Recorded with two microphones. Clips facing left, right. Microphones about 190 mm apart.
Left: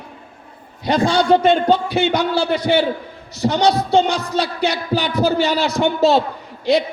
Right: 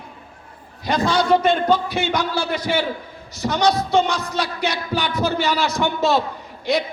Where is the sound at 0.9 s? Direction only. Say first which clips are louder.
Left 3 dB; 30° left (ahead or behind).